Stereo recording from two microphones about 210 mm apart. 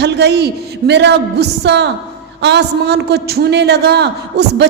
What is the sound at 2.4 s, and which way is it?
A man's voice, 55° right (ahead or behind).